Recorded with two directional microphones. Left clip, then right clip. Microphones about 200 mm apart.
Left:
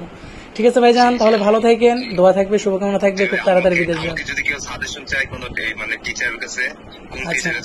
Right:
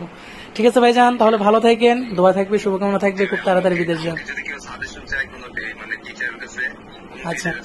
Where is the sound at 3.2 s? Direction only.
30° left (ahead or behind).